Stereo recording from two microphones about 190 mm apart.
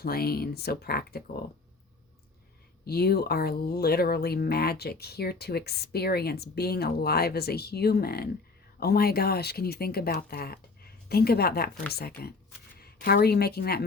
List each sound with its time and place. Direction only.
0.0 s speech: 55° left (ahead or behind)
2.8 s a woman's voice: 55° left (ahead or behind)